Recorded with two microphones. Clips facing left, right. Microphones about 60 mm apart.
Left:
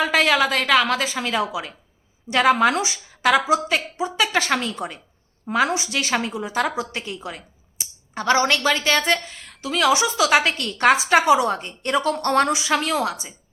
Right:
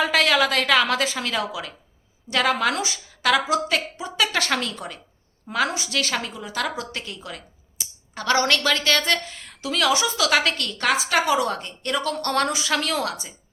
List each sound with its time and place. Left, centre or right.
0.0 s a woman's voice: centre
9.3 s a sound: centre
9.7 s a woman's voice: centre